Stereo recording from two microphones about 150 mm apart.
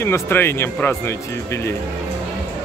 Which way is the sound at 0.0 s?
15° left (ahead or behind).